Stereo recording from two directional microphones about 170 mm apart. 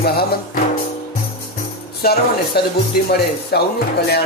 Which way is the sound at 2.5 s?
65° left (ahead or behind).